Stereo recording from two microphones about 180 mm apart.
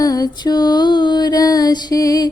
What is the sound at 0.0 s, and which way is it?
Mantra, 20° left (ahead or behind).